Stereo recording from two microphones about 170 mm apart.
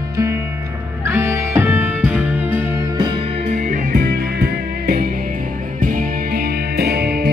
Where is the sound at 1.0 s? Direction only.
15° right (ahead or behind).